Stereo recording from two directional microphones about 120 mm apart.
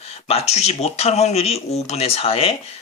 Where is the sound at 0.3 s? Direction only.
60° left (ahead or behind).